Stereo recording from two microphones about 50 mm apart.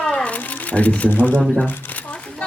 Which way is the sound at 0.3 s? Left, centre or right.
Left.